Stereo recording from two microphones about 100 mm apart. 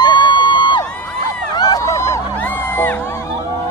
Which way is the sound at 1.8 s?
30° left (ahead or behind).